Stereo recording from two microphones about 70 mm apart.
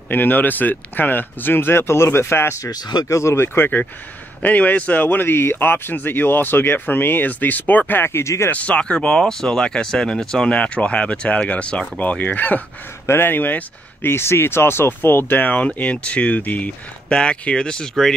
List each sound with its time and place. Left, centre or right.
0.1 s speech: left
2.6 s speech: left
3.1 s speech: left
8.5 s speech: centre
13.0 s speech: left
15.5 s speech: centre